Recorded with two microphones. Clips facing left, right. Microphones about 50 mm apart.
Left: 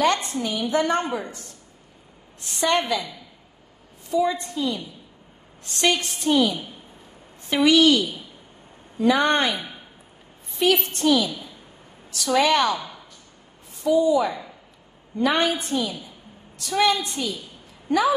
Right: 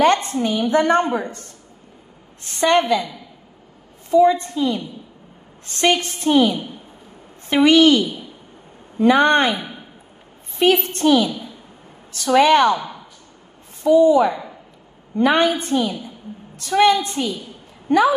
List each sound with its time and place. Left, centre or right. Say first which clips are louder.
0.0 s a woman's voice: right 5 dB; right
4.1 s a woman's voice: right 8 dB; right